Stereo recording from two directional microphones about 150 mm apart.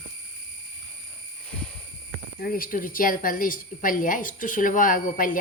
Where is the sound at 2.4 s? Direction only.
75° left (ahead or behind).